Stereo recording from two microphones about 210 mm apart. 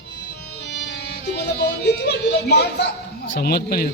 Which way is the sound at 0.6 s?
55° left (ahead or behind).